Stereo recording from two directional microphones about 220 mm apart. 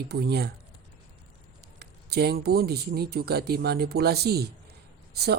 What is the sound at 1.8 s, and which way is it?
Speech, 45° right (ahead or behind).